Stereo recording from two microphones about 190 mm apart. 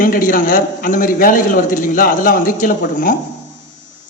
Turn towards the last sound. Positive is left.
turn(degrees=45)  # may be behind; listen again after turning